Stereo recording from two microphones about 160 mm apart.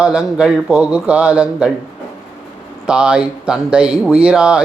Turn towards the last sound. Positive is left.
turn(degrees=-5)  # may be behind; listen again after turning